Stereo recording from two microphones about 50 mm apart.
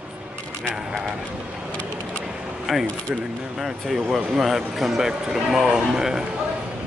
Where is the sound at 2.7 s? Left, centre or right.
Centre.